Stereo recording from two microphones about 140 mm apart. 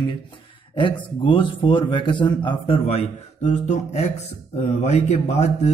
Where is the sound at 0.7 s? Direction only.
35° left (ahead or behind).